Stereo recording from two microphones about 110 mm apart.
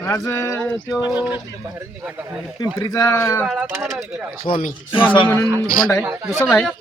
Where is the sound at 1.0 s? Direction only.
15° right (ahead or behind).